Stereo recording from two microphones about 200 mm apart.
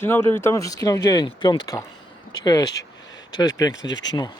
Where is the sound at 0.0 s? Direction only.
10° left (ahead or behind).